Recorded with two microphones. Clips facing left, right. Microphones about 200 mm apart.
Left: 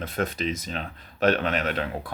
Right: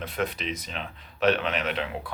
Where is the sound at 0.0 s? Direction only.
45° left (ahead or behind).